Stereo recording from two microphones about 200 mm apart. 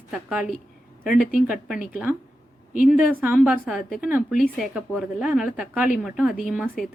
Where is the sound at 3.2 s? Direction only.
10° right (ahead or behind).